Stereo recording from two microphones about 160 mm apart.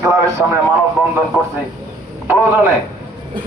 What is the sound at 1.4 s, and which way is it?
Speech, centre (ahead or behind).